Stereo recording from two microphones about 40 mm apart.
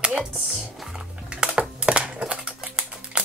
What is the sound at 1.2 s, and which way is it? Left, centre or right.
Typing, right.